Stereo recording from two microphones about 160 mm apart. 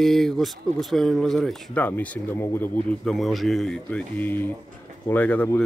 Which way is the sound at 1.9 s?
15° left (ahead or behind).